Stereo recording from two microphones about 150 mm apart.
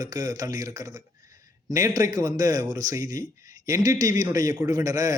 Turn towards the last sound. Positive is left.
turn(degrees=-20)  # may be behind; listen again after turning